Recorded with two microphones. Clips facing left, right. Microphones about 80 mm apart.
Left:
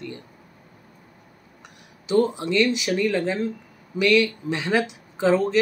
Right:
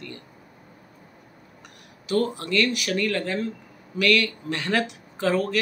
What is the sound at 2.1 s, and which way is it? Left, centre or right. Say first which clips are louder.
Speech: left 4 dB; centre.